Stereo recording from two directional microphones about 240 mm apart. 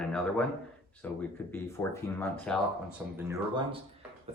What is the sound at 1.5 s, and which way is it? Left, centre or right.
Speech, centre.